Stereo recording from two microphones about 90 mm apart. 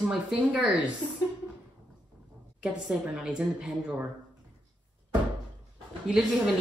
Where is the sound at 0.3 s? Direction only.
15° right (ahead or behind).